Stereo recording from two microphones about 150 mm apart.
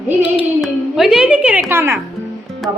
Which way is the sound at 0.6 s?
Centre (ahead or behind).